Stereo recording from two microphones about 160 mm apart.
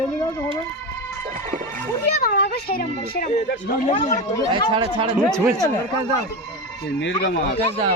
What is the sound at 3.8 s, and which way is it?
Speech, 45° left (ahead or behind).